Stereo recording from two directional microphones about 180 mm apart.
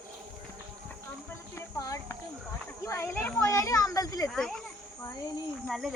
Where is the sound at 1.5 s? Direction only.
15° left (ahead or behind).